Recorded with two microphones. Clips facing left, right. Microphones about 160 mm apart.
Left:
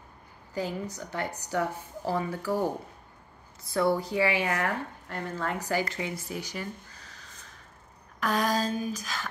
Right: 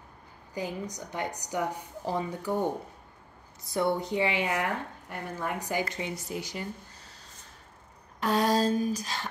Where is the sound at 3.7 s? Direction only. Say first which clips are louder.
Left 2 dB; 20° right (ahead or behind).